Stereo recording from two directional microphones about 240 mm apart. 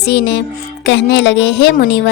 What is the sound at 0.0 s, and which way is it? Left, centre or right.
A woman's voice, left.